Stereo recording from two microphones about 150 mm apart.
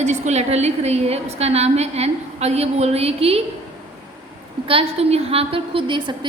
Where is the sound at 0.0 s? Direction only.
50° right (ahead or behind).